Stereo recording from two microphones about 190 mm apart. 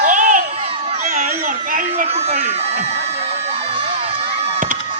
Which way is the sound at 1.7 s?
45° right (ahead or behind).